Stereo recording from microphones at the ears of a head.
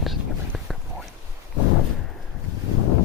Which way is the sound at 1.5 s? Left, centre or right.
Left.